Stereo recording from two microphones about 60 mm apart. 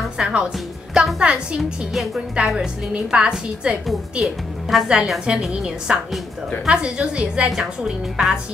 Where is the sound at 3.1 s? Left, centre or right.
Centre.